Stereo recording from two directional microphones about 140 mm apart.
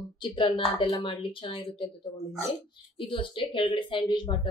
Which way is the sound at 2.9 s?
35° left (ahead or behind).